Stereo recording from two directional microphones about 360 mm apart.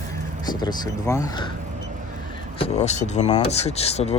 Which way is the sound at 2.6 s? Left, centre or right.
Centre.